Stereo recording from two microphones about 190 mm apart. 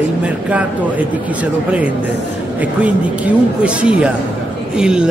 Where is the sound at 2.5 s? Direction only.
5° right (ahead or behind).